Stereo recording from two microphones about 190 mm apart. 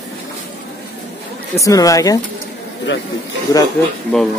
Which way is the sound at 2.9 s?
75° left (ahead or behind).